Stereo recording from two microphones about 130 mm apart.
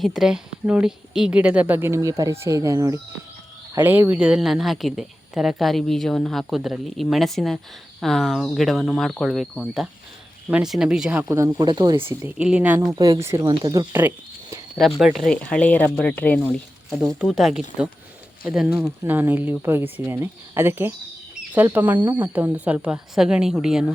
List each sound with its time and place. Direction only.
0.0 s speech: 5° right (ahead or behind)
11.3 s speech: 25° right (ahead or behind)
11.6 s speech: 35° right (ahead or behind)
12.4 s speech: 10° right (ahead or behind)
12.9 s speech: 25° right (ahead or behind)
14.8 s speech: 5° right (ahead or behind)
17.2 s speech: centre (ahead or behind)
19.0 s speech: 15° right (ahead or behind)